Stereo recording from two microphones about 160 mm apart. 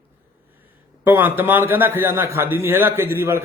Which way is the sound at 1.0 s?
10° right (ahead or behind).